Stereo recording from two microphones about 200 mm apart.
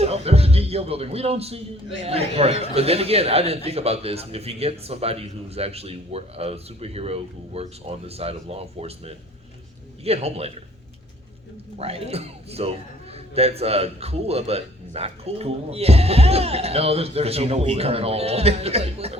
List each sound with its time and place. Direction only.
0.0 s a man's voice: 30° right (ahead or behind)
11.8 s a man's voice: 30° right (ahead or behind)